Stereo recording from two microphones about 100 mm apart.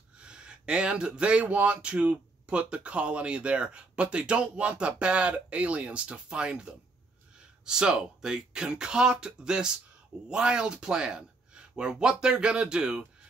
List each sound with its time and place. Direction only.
0.2 s speech: 10° right (ahead or behind)